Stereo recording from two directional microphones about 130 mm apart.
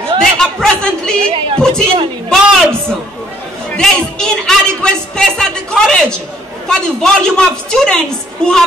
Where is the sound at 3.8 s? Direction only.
5° left (ahead or behind).